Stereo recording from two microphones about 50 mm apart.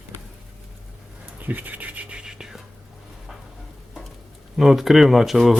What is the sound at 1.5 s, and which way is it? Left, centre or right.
Scratch, right.